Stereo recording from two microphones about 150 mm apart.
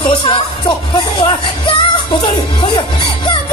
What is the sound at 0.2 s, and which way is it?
Music, 30° left (ahead or behind).